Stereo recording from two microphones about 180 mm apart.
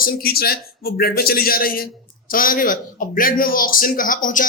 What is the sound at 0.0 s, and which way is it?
A man's voice, 55° left (ahead or behind).